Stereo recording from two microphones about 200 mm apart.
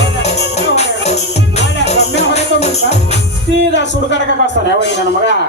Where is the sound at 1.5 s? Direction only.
35° left (ahead or behind).